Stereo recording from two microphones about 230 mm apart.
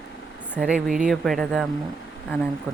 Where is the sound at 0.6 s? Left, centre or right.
Centre.